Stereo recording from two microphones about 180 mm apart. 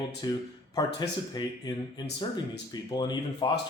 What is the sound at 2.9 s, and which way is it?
Speech, 25° left (ahead or behind).